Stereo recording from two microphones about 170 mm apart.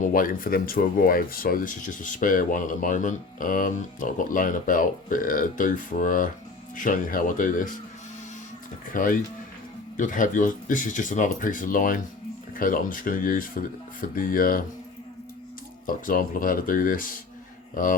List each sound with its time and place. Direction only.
0.0 s speech: 55° left (ahead or behind)
8.9 s speech: 55° left (ahead or behind)
15.9 s speech: 55° left (ahead or behind)